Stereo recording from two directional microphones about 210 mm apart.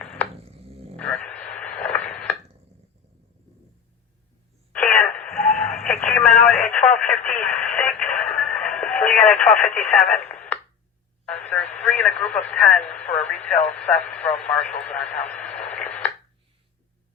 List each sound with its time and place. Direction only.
0.0 s a sound: 5° left (ahead or behind)
0.3 s a sound: 30° right (ahead or behind)
0.9 s radio: 5° left (ahead or behind)
4.7 s radio: 5° left (ahead or behind)
7.3 s music: 5° left (ahead or behind)
10.1 s radio: 5° left (ahead or behind)
11.3 s a sound: 5° left (ahead or behind)
11.8 s radio: 5° left (ahead or behind)
12.9 s speech: 5° left (ahead or behind)